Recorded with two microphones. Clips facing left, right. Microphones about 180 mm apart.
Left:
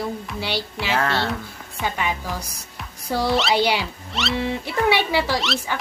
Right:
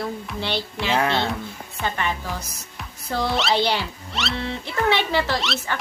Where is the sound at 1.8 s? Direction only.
10° left (ahead or behind).